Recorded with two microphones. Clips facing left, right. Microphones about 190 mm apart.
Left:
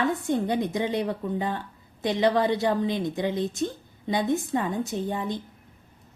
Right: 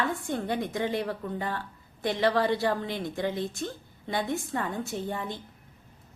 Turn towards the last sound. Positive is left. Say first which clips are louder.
# left 4 dB
turn(degrees=15)  # may be behind; listen again after turning